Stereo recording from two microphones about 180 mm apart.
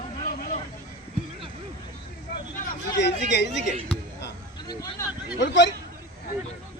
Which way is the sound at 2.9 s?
70° left (ahead or behind).